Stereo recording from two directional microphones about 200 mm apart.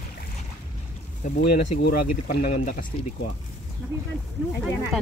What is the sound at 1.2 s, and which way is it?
Speech, 40° left (ahead or behind).